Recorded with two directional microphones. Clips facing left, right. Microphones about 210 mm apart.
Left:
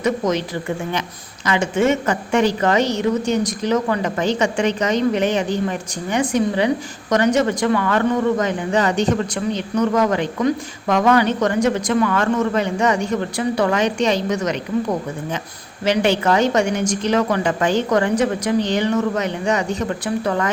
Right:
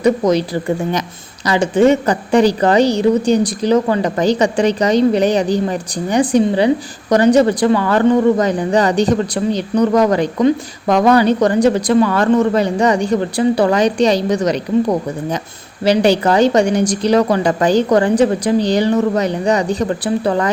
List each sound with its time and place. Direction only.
0.0 s speech: 35° right (ahead or behind)